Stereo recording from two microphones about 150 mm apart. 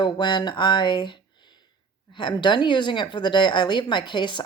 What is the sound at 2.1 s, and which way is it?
Speech, 30° left (ahead or behind).